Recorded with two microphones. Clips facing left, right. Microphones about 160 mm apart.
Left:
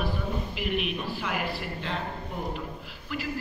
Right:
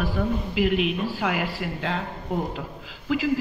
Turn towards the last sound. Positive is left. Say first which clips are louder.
# right 10 dB
turn(degrees=-90)